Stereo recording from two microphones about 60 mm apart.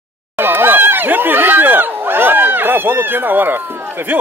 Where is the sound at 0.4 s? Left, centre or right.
Right.